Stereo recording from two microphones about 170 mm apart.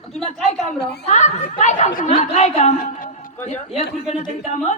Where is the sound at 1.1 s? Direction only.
40° left (ahead or behind).